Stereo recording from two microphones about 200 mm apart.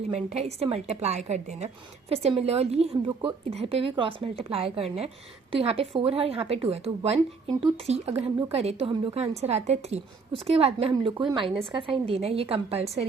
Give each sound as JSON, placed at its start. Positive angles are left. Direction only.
{"t": 0.1, "sound": "a woman's voice", "side_deg": -30}